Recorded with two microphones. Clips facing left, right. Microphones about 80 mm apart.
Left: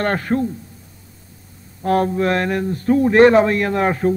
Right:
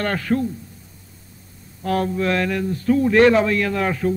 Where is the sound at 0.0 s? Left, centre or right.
Left.